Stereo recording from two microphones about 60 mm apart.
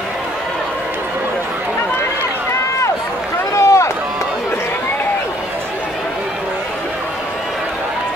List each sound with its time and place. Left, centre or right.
3.5 s run: left